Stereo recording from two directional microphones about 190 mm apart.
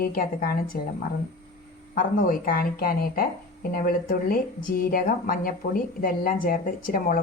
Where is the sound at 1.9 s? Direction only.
50° left (ahead or behind).